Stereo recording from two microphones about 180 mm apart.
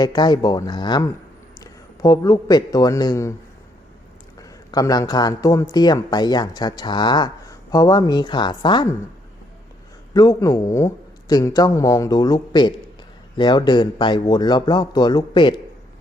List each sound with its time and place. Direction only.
0.0 s a man's voice: 25° left (ahead or behind)
4.4 s a man's voice: 20° left (ahead or behind)
10.2 s a man's voice: 20° left (ahead or behind)